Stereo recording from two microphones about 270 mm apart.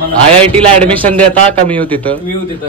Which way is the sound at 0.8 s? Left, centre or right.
Centre.